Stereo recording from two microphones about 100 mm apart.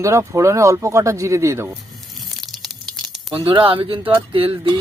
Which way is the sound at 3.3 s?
60° right (ahead or behind).